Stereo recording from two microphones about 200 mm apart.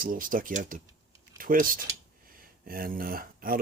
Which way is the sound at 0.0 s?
45° right (ahead or behind).